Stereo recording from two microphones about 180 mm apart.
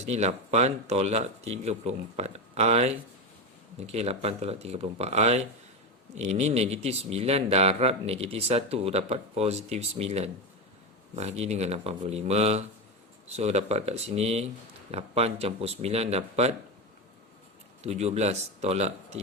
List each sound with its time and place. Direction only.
0.0 s speech: 40° right (ahead or behind)
17.8 s speech: 35° right (ahead or behind)